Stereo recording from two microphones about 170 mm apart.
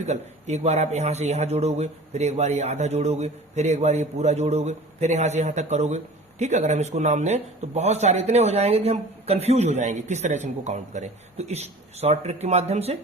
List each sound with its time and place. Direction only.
0.0 s a man's voice: 40° right (ahead or behind)